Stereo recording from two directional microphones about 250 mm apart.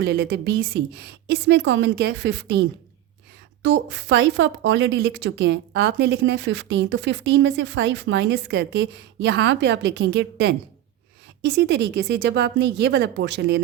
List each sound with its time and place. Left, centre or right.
0.0 s a woman's voice: right